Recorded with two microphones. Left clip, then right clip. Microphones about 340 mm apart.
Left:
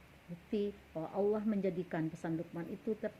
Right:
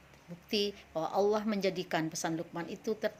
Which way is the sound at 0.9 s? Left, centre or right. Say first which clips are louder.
Right 5 dB; right.